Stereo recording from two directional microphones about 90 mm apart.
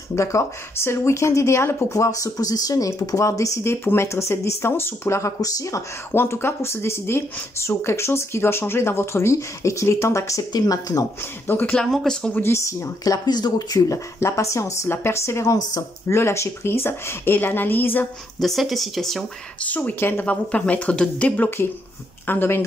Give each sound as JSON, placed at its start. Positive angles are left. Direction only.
{"t": 0.1, "sound": "speech", "side_deg": 35}
{"t": 6.1, "sound": "speech", "side_deg": 25}
{"t": 10.5, "sound": "speech", "side_deg": 45}
{"t": 11.4, "sound": "speech", "side_deg": 25}
{"t": 11.7, "sound": "speech", "side_deg": 5}
{"t": 12.4, "sound": "speech", "side_deg": 30}
{"t": 16.1, "sound": "speech", "side_deg": 30}
{"t": 18.4, "sound": "speech", "side_deg": 0}
{"t": 19.6, "sound": "a woman's voice", "side_deg": 15}